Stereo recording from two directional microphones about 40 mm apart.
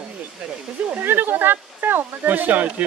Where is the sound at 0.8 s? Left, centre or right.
Right.